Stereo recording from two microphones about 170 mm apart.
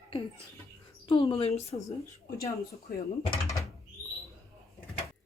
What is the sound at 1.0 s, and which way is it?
Speech, 30° left (ahead or behind).